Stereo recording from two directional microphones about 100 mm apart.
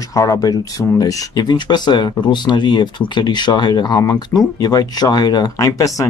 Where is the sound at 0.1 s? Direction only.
35° left (ahead or behind).